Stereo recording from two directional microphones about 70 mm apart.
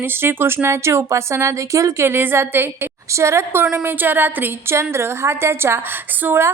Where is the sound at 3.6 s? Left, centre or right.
Centre.